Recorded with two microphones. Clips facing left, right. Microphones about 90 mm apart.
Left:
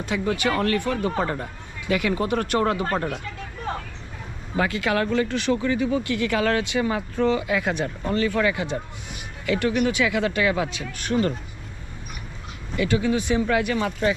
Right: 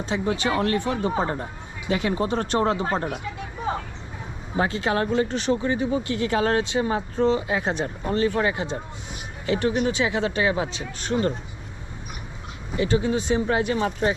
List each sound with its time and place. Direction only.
0.0 s speech: 25° right (ahead or behind)
2.0 s speech: 30° right (ahead or behind); by 3.8 s 10° right (ahead or behind)
4.5 s speech: 25° right (ahead or behind)
12.7 s speech: 25° right (ahead or behind)
13.8 s speech: 35° right (ahead or behind)